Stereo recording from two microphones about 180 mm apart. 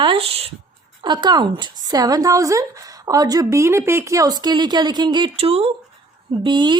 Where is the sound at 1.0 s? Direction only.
25° right (ahead or behind).